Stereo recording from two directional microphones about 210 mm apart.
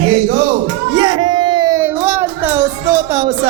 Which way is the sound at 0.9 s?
25° right (ahead or behind).